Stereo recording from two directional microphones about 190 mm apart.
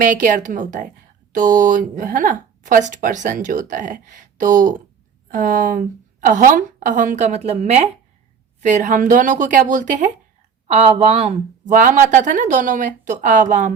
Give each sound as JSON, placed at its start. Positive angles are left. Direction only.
{"t": 0.0, "sound": "speech", "side_deg": -40}